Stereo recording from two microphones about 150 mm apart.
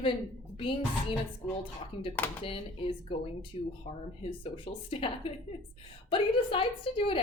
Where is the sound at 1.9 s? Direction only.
40° left (ahead or behind).